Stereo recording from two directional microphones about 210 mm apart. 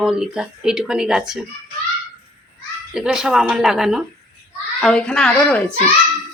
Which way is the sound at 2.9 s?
5° right (ahead or behind).